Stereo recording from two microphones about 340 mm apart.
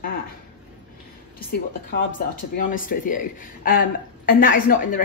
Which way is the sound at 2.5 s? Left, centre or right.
Left.